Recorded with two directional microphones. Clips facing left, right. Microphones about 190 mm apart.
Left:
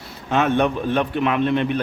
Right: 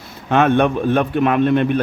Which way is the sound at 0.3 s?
60° right (ahead or behind).